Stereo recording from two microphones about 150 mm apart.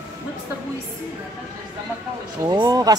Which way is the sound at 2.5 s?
25° right (ahead or behind).